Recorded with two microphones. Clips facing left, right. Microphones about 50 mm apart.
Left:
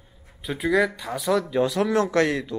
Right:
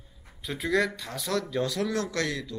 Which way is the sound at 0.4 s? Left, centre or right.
Centre.